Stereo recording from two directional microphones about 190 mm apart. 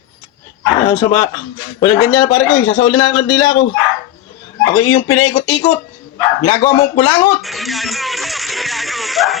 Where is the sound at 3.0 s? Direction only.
20° left (ahead or behind).